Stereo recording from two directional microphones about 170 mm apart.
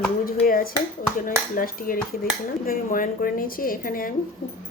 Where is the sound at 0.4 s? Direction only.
60° left (ahead or behind).